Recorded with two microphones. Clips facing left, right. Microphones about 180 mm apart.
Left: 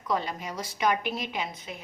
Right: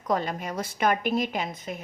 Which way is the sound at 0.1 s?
50° right (ahead or behind).